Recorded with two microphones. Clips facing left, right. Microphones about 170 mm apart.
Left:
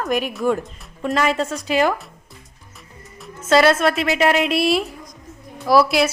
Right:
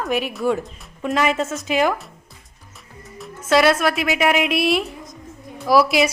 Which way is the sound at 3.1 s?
Centre (ahead or behind).